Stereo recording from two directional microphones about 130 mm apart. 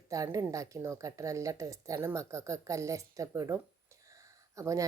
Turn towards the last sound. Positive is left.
turn(degrees=-25)  # may be behind; listen again after turning